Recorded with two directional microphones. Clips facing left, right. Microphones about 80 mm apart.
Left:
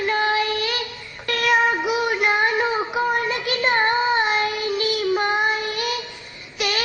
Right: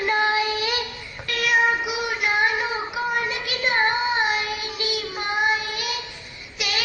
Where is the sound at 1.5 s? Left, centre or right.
Left.